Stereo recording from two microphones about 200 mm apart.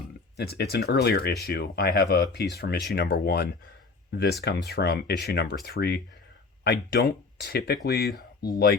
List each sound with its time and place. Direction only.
0.3 s speech: 55° left (ahead or behind)